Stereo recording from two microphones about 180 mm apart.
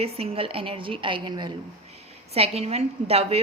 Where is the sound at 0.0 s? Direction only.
35° right (ahead or behind).